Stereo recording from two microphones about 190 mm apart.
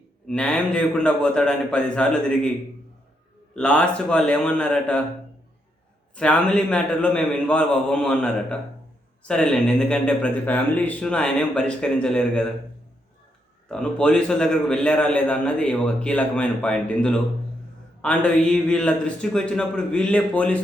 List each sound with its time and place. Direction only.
0.3 s a man's voice: 5° left (ahead or behind)
3.5 s a man's voice: 5° left (ahead or behind)
6.1 s a man's voice: 5° left (ahead or behind)
13.7 s a man's voice: 5° left (ahead or behind)